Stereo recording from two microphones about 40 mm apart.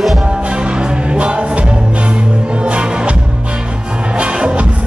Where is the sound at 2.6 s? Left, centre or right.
Right.